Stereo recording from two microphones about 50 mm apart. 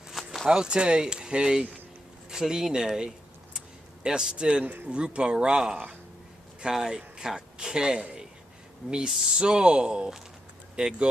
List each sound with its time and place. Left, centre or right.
0.5 s speech: centre
3.5 s a sound: centre
4.8 s speech: right